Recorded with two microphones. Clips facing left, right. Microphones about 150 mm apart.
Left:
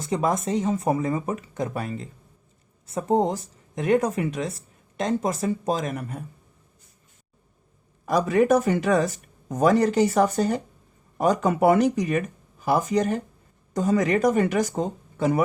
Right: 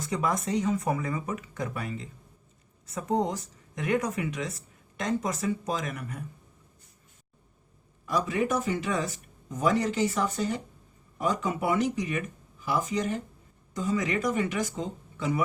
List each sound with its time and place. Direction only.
0.0 s speech: 25° left (ahead or behind)
8.0 s a man's voice: 50° left (ahead or behind)
9.5 s speech: 65° left (ahead or behind)
9.9 s speech: 40° left (ahead or behind)